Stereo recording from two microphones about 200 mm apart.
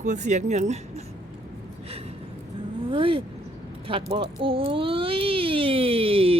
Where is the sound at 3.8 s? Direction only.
25° right (ahead or behind).